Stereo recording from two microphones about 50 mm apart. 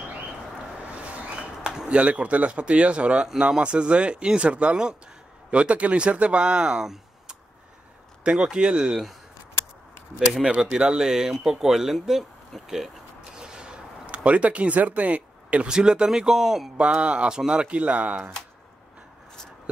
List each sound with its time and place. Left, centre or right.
0.8 s a sound: right
1.9 s speech: right
10.1 s speech: centre
15.7 s speech: centre
16.7 s speech: right